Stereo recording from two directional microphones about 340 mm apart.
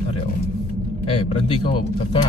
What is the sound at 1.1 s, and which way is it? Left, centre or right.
Speech, centre.